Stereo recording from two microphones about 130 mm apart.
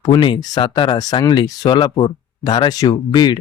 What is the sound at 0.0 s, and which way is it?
Speech, 35° left (ahead or behind).